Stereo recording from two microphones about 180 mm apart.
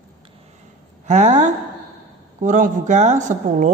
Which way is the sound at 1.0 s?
40° right (ahead or behind).